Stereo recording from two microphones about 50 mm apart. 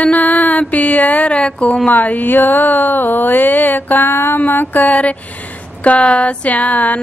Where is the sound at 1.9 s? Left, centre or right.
Left.